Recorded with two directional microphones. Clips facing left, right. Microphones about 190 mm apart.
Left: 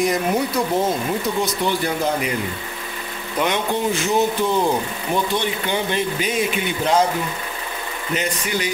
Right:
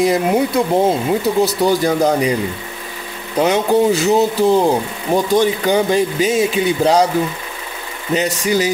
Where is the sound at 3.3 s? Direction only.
35° right (ahead or behind).